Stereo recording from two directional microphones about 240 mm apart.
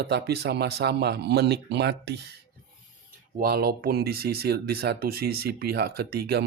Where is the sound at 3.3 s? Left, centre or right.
Right.